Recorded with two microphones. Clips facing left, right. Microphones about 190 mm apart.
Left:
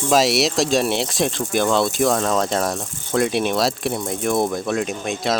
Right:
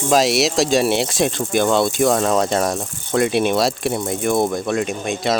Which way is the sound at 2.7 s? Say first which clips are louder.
Right 3 dB; 15° right (ahead or behind).